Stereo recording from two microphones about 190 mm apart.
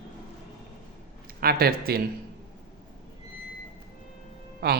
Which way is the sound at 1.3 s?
50° right (ahead or behind).